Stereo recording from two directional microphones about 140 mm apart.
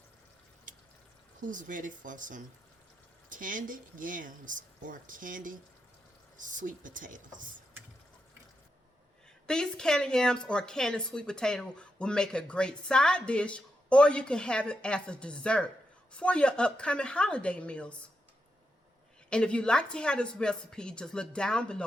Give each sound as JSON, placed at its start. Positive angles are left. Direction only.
{"t": 1.4, "sound": "speech", "side_deg": -65}
{"t": 9.5, "sound": "speech", "side_deg": 5}
{"t": 19.3, "sound": "speech", "side_deg": 5}